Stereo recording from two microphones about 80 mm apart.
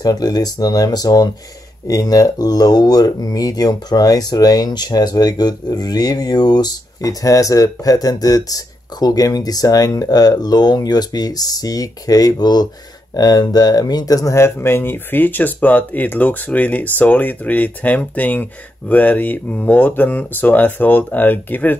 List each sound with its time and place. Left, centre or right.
0.0 s speech: left